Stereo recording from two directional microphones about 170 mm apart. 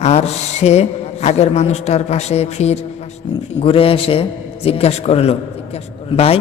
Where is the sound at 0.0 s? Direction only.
40° left (ahead or behind).